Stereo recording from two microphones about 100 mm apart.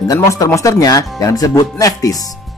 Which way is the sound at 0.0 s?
35° left (ahead or behind).